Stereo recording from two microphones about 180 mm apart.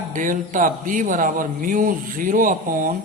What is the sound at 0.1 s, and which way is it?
Speech, 45° right (ahead or behind).